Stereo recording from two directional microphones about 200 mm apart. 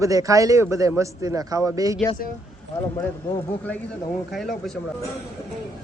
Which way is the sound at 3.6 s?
5° left (ahead or behind).